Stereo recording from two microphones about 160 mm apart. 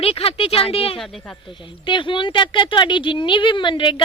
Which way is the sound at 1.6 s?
30° left (ahead or behind).